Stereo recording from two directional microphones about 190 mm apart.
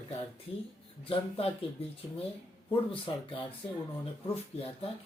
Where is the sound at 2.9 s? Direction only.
25° left (ahead or behind).